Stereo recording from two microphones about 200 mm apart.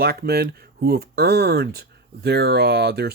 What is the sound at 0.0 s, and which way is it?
Speech, 50° right (ahead or behind).